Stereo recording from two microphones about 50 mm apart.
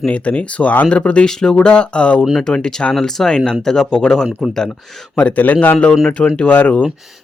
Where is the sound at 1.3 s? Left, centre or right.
Centre.